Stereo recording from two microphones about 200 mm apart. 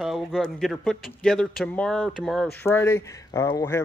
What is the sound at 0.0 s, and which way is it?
Speech, centre (ahead or behind).